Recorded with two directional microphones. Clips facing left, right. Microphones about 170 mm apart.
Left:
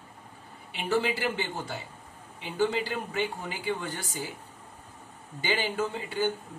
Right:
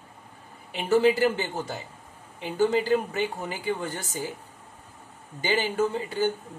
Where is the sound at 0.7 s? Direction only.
45° right (ahead or behind).